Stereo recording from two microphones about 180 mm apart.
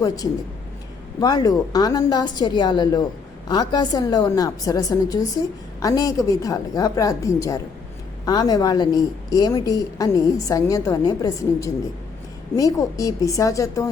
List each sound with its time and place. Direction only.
1.2 s a woman's voice: 25° left (ahead or behind)